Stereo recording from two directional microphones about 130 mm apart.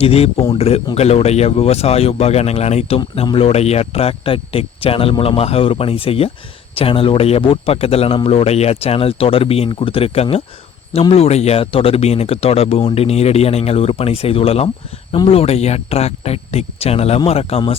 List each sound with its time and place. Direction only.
0.0 s a man's voice: 50° left (ahead or behind)